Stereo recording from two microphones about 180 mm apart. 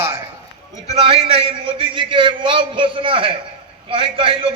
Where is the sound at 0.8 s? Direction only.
35° right (ahead or behind).